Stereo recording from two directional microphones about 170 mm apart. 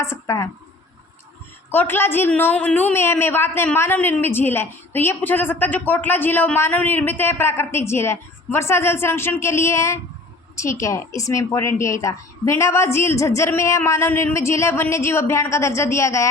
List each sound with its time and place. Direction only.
0.0 s a woman's voice: 15° left (ahead or behind)
1.7 s a woman's voice: 10° left (ahead or behind)